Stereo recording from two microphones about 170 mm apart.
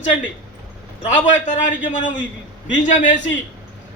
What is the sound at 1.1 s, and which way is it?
Speech, 50° left (ahead or behind).